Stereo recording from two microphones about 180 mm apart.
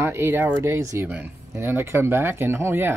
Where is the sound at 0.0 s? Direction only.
15° right (ahead or behind).